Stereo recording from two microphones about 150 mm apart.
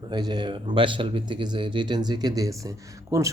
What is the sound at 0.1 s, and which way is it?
A man's voice, 30° right (ahead or behind).